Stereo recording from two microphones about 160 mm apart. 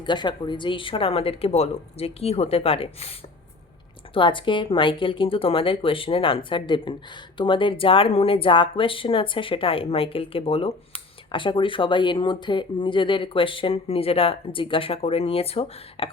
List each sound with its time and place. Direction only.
0.0 s speech: 30° left (ahead or behind)